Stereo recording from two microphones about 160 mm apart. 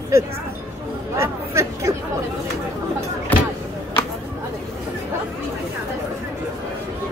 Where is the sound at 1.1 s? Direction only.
20° right (ahead or behind).